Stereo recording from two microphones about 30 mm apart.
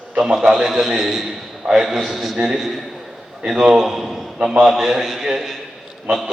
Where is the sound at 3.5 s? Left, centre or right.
Centre.